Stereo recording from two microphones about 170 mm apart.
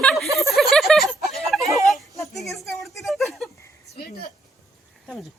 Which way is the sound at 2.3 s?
Centre (ahead or behind).